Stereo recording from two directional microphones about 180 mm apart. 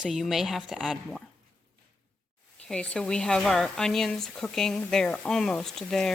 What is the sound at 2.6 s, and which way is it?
Speech, 5° left (ahead or behind).